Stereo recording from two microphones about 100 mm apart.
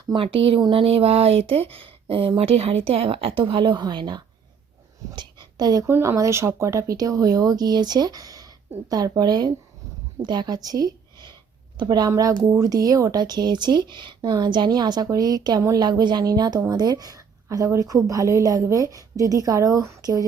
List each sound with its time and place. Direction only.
0.1 s speech: 65° right (ahead or behind); by 1.6 s 85° right
1.7 s speech: 65° right (ahead or behind); by 4.2 s 50° right (ahead or behind)
5.1 s a sound: 45° right (ahead or behind)
5.8 s speech: 30° right (ahead or behind)